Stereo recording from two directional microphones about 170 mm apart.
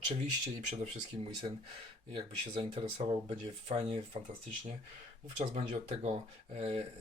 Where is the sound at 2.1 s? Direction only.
30° right (ahead or behind).